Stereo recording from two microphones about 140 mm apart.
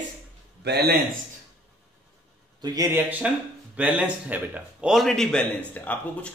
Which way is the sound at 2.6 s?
25° right (ahead or behind).